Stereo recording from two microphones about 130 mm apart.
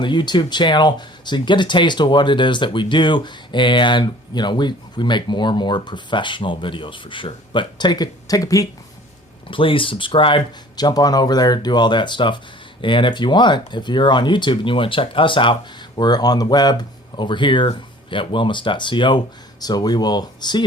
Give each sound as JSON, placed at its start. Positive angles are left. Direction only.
{"t": 0.0, "sound": "speech", "side_deg": 35}
{"t": 9.5, "sound": "speech", "side_deg": 40}